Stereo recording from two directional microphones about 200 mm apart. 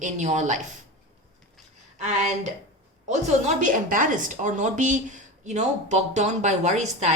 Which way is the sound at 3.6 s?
40° right (ahead or behind).